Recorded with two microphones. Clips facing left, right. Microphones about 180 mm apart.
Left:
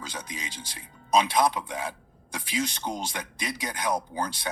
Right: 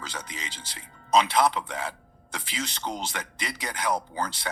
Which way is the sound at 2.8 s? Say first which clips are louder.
Even; 10° left (ahead or behind).